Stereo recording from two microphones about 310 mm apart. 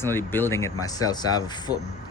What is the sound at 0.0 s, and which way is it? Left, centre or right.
Speech, centre.